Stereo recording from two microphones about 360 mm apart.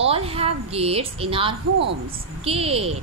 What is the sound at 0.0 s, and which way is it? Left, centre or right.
A woman's voice, centre.